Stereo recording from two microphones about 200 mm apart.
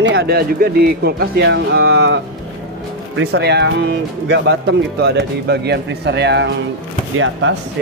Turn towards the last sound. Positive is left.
turn(degrees=-80)